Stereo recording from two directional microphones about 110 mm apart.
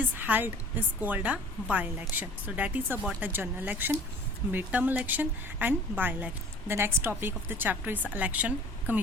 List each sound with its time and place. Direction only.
0.0 s a woman's voice: 15° right (ahead or behind)